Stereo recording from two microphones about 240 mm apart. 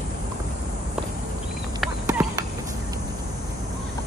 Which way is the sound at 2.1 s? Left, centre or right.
Centre.